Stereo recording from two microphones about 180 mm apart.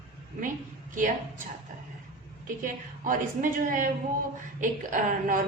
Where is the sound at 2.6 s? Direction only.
45° right (ahead or behind).